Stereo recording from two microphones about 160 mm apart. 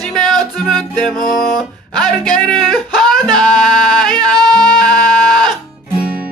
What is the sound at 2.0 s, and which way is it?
Speech, 5° left (ahead or behind).